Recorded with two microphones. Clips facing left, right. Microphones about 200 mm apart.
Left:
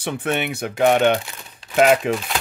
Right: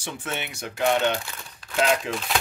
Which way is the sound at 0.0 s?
60° left (ahead or behind).